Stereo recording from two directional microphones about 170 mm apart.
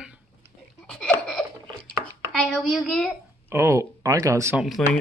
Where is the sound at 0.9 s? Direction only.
5° left (ahead or behind).